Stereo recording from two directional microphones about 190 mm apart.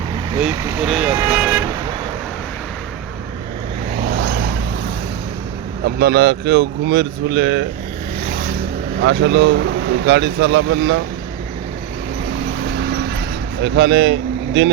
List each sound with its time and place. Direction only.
0.5 s speech: 15° right (ahead or behind)
0.8 s speech: centre (ahead or behind)
4.1 s vehicle: 60° right (ahead or behind)
5.8 s speech: 55° right (ahead or behind)
12.7 s vehicle: 55° right (ahead or behind)
13.6 s speech: 65° right (ahead or behind)